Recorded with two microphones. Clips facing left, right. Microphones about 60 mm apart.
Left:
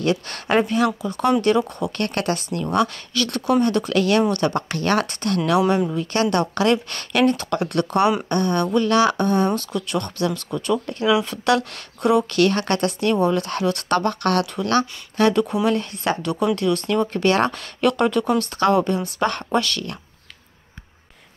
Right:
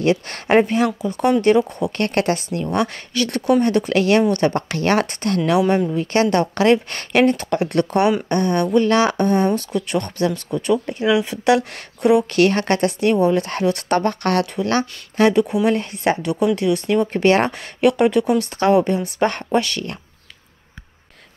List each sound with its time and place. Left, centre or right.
0.0 s speech: right